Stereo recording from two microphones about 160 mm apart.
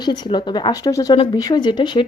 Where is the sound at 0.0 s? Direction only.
25° left (ahead or behind).